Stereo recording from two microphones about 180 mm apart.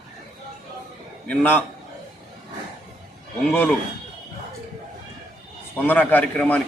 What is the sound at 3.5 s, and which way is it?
Speech, 10° left (ahead or behind).